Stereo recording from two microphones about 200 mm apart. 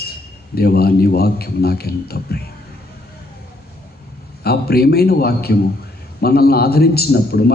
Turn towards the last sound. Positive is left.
turn(degrees=50)  # may be behind; listen again after turning